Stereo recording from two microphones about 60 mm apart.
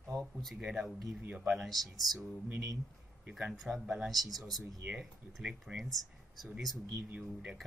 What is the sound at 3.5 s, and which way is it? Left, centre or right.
Speech, centre.